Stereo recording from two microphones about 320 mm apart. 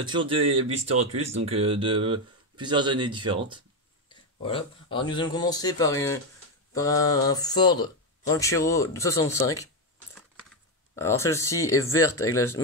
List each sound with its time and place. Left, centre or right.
0.0 s speech: centre
4.4 s speech: centre
11.0 s speech: centre